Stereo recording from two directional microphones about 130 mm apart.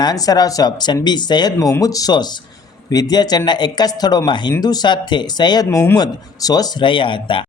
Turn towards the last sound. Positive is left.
turn(degrees=40)  # may be behind; listen again after turning